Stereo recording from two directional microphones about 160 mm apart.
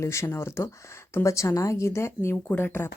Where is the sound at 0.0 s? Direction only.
15° left (ahead or behind).